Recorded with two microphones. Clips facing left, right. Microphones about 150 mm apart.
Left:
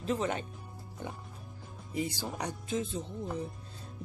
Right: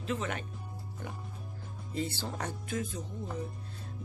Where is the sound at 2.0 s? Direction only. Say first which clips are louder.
Left 1 dB; 15° left (ahead or behind).